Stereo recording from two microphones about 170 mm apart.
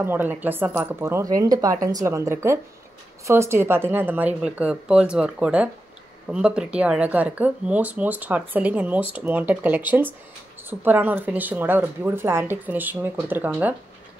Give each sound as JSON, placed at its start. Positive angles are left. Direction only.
{"t": 0.0, "sound": "a woman's voice", "side_deg": -10}